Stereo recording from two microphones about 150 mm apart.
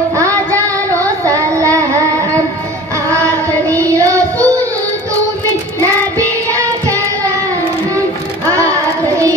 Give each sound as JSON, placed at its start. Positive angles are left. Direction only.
{"t": 1.2, "sound": "child singing", "side_deg": -20}
{"t": 3.1, "sound": "child singing", "side_deg": -20}
{"t": 4.1, "sound": "child singing", "side_deg": 10}
{"t": 6.1, "sound": "music", "side_deg": -20}